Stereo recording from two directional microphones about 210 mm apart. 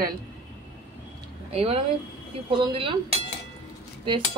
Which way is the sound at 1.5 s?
25° right (ahead or behind).